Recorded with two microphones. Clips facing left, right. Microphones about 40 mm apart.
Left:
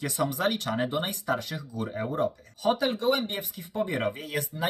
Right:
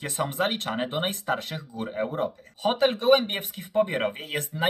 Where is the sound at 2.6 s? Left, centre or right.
Right.